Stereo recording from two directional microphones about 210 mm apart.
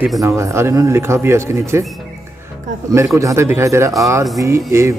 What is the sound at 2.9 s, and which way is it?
Speech, 15° right (ahead or behind).